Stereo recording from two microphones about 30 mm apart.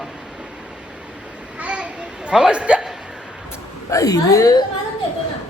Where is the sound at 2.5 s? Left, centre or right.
Right.